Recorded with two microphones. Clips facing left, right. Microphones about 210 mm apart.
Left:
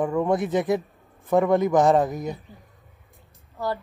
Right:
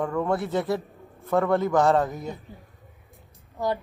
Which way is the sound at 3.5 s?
15° right (ahead or behind).